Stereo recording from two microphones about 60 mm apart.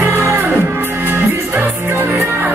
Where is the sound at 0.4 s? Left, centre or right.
Right.